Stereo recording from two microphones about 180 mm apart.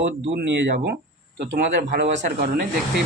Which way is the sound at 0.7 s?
60° right (ahead or behind).